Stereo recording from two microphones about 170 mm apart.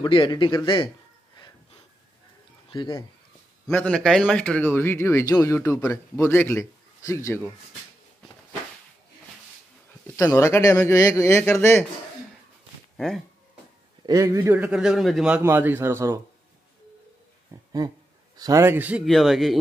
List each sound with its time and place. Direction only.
0.0 s speech: 30° left (ahead or behind)
2.7 s speech: 25° left (ahead or behind)
3.7 s speech: 5° left (ahead or behind)
10.1 s speech: 15° left (ahead or behind)
12.9 s speech: 5° left (ahead or behind)
14.0 s a man's voice: 20° right (ahead or behind)
17.5 s a sound: 15° right (ahead or behind)
18.4 s a man's voice: 15° right (ahead or behind)
19.0 s speech: centre (ahead or behind)